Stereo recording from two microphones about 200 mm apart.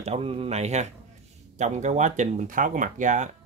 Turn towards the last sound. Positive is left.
turn(degrees=-40)  # may be behind; listen again after turning